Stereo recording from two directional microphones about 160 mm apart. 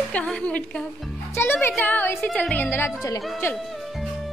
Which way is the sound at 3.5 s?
Centre (ahead or behind).